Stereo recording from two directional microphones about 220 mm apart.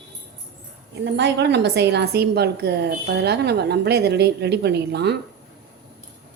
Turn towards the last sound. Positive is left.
turn(degrees=-50)  # may be behind; listen again after turning